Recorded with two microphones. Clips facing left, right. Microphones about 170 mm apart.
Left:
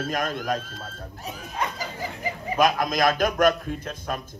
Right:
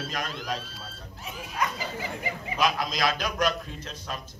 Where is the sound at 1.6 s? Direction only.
40° left (ahead or behind).